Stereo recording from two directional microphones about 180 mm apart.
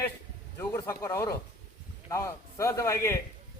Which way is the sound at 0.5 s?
15° left (ahead or behind).